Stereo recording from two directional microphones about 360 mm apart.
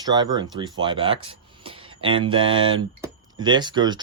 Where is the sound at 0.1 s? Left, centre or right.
Centre.